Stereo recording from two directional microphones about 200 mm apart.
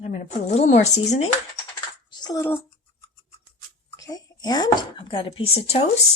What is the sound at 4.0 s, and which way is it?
Speech, 20° left (ahead or behind).